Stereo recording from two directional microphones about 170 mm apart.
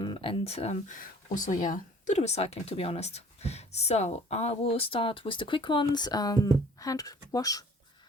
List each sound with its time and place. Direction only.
0.0 s speech: 30° left (ahead or behind)